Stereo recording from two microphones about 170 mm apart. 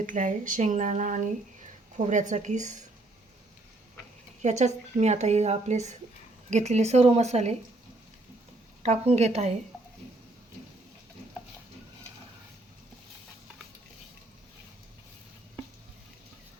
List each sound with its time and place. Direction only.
0.0 s speech: 50° right (ahead or behind)
4.4 s a woman's voice: 40° right (ahead or behind)
8.8 s a woman's voice: 40° right (ahead or behind)